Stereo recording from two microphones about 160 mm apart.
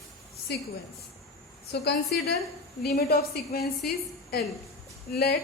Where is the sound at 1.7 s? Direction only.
90° left.